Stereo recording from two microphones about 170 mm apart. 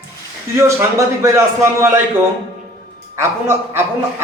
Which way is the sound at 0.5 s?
15° right (ahead or behind).